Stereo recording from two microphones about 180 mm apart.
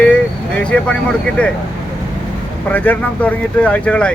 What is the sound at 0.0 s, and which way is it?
Vehicle, 5° left (ahead or behind).